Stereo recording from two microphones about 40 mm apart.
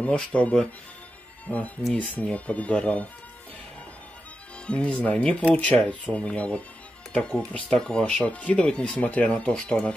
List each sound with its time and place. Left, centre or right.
0.0 s speech: left
2.0 s speech: left
4.6 s speech: left
9.7 s speech: left